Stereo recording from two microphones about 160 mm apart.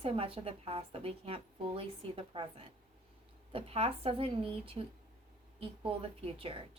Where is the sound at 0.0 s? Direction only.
35° right (ahead or behind).